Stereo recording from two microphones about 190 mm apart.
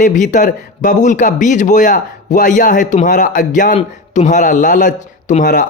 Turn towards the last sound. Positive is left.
turn(degrees=40)  # may be behind; listen again after turning